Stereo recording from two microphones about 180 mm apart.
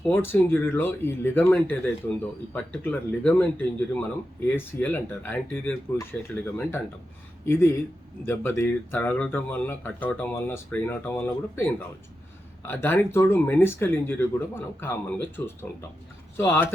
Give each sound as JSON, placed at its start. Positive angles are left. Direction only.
{"t": 0.1, "sound": "speech", "side_deg": 10}
{"t": 4.5, "sound": "speech", "side_deg": 10}